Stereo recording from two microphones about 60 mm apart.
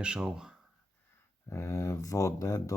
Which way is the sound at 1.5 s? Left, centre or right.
Left.